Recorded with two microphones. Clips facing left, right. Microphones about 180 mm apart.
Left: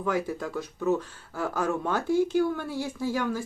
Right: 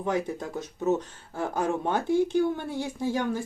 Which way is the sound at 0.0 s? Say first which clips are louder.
Even; 25° right (ahead or behind).